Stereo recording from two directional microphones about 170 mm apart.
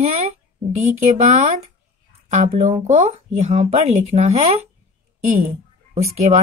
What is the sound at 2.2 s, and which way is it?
A woman's voice, 45° right (ahead or behind).